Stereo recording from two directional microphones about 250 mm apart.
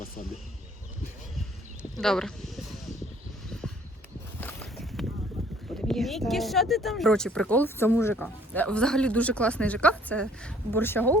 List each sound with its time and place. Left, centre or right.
2.0 s a sound: centre
4.4 s walk: centre
5.9 s speech: centre